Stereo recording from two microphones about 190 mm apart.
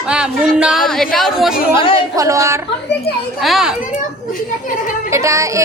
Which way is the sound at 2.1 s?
15° right (ahead or behind).